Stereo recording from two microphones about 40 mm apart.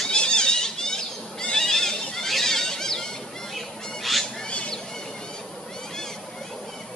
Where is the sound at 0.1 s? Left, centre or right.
Left.